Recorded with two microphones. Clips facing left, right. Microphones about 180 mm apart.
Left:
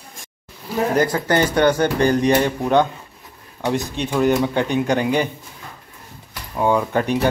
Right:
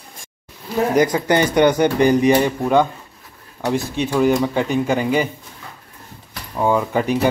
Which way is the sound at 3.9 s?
5° right (ahead or behind).